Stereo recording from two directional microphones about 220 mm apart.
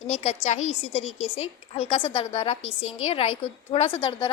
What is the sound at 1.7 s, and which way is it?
A woman's voice, 25° left (ahead or behind).